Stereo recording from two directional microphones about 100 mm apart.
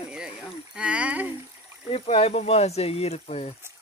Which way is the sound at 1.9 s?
90° left.